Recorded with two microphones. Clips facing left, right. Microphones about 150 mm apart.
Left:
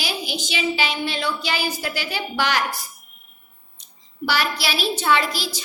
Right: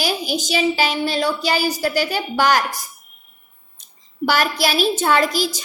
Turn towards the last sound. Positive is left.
turn(degrees=-45)  # may be behind; listen again after turning